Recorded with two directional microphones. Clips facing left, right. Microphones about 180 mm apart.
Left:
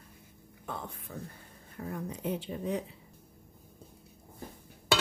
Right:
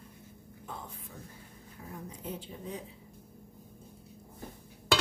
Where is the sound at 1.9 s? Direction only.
65° left (ahead or behind).